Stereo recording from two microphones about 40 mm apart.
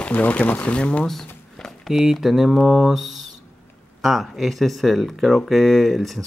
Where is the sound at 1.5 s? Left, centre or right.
Centre.